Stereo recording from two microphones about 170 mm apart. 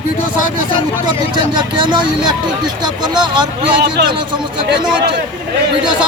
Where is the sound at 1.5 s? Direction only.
25° right (ahead or behind).